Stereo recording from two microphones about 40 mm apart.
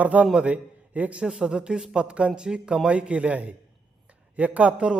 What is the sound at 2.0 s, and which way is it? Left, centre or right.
A man's voice, right.